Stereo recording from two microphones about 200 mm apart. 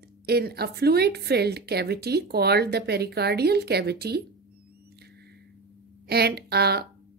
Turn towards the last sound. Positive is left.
turn(degrees=-55)  # may be behind; listen again after turning